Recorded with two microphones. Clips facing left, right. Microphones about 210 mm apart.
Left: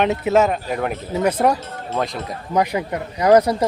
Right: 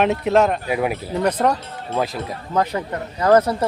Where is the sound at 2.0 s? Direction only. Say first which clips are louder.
Right 1 dB; 5° right (ahead or behind).